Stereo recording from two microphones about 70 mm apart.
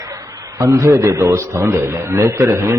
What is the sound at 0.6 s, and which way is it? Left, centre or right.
A man's voice, right.